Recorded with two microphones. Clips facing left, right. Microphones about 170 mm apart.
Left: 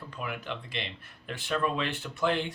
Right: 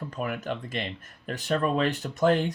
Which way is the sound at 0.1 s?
45° right (ahead or behind).